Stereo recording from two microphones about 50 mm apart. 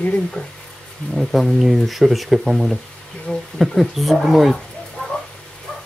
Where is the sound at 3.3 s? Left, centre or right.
Centre.